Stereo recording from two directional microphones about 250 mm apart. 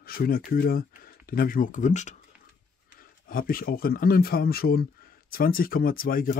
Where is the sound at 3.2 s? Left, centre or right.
Left.